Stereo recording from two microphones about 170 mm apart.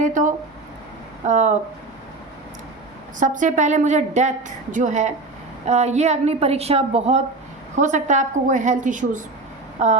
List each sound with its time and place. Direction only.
0.0 s a woman's voice: 50° right (ahead or behind)
3.2 s a woman's voice: 50° right (ahead or behind)